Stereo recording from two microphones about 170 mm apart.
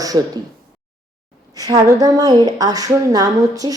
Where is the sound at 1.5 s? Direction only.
20° right (ahead or behind).